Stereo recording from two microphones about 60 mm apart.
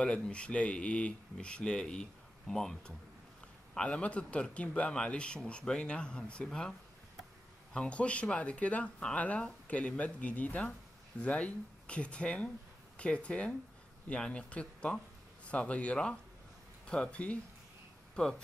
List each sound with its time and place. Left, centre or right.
0.0 s speech: centre
3.7 s speech: centre
7.7 s speech: centre